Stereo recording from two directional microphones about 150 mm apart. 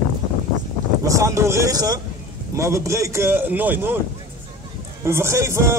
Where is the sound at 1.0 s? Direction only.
20° right (ahead or behind).